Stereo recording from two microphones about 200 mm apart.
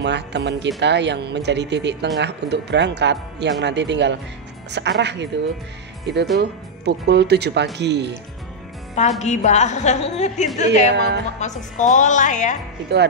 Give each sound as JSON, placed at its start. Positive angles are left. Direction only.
{"t": 0.0, "sound": "speech", "side_deg": -60}
{"t": 9.2, "sound": "a woman's voice", "side_deg": 35}
{"t": 11.0, "sound": "speech", "side_deg": -55}
{"t": 11.3, "sound": "a woman's voice", "side_deg": 35}